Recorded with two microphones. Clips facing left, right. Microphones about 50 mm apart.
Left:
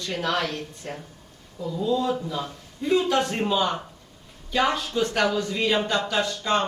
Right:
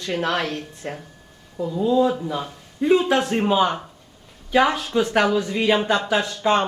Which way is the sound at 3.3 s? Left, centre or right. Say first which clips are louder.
Right 5 dB; right.